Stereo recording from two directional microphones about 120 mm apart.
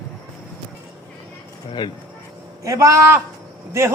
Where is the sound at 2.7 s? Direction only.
25° right (ahead or behind).